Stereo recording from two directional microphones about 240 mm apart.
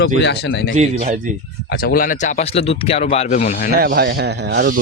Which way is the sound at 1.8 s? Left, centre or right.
Left.